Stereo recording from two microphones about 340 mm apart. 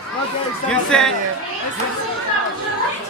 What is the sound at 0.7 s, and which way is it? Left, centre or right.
Speech, centre.